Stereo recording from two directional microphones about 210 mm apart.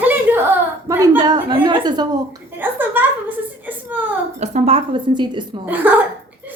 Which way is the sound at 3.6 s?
10° right (ahead or behind).